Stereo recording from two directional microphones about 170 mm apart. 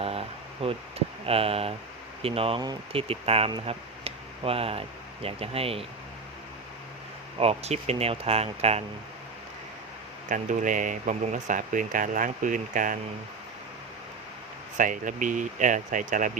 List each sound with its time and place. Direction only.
0.0 s a sound: 35° right (ahead or behind)
2.2 s speech: 35° right (ahead or behind)
7.3 s speech: 35° right (ahead or behind)
10.2 s speech: 50° right (ahead or behind)
14.8 s speech: 50° right (ahead or behind)